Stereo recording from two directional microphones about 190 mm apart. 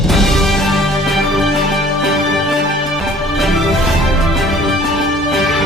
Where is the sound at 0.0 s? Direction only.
Centre (ahead or behind).